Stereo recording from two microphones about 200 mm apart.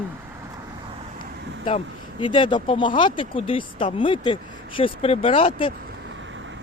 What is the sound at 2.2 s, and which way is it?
Speech, 25° left (ahead or behind).